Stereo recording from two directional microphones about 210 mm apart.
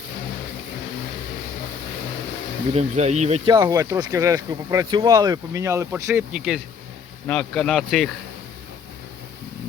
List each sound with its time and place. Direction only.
2.7 s speech: 30° right (ahead or behind)
3.5 s speech: 20° right (ahead or behind); by 8.1 s centre (ahead or behind)